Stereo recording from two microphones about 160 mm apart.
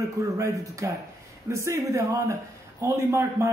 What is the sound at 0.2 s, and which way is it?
A man's voice, 20° right (ahead or behind).